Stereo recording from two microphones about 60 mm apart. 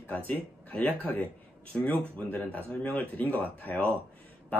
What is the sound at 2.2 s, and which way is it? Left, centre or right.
Speech, left.